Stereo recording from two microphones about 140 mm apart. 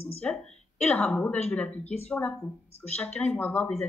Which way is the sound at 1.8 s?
50° left (ahead or behind).